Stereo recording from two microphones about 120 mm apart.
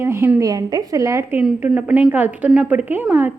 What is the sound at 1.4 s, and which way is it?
A woman's voice, 10° right (ahead or behind).